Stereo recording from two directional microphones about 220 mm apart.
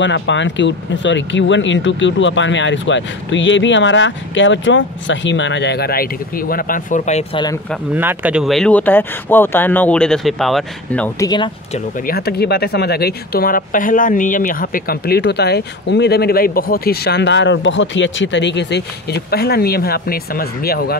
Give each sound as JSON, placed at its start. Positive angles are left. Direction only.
{"t": 0.0, "sound": "speech", "side_deg": 55}
{"t": 7.9, "sound": "speech", "side_deg": -10}
{"t": 11.2, "sound": "speech", "side_deg": 20}
{"t": 12.1, "sound": "speech", "side_deg": 45}